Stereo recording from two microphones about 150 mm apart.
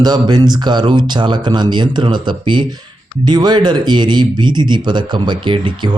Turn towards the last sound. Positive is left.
turn(degrees=-30)  # may be behind; listen again after turning